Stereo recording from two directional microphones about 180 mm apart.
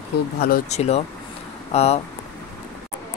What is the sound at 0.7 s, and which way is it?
Speech, 35° left (ahead or behind).